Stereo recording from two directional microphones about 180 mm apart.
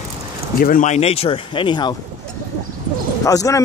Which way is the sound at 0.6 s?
50° left (ahead or behind).